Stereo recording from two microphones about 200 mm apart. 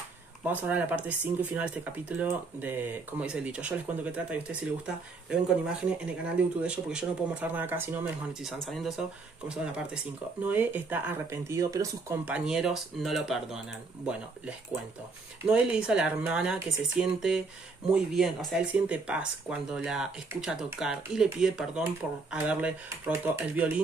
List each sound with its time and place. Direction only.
0.5 s speech: 10° right (ahead or behind)
10.4 s speech: 10° right (ahead or behind)
15.4 s speech: 5° right (ahead or behind)